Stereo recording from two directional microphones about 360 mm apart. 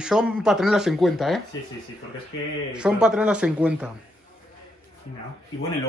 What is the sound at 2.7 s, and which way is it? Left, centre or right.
Speech, centre.